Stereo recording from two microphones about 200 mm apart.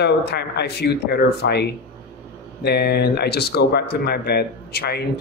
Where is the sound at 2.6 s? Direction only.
55° left (ahead or behind).